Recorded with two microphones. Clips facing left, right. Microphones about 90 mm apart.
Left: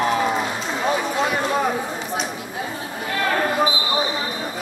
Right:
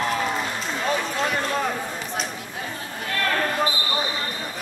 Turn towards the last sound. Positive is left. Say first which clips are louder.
# left 4 dB
turn(degrees=10)  # may be behind; listen again after turning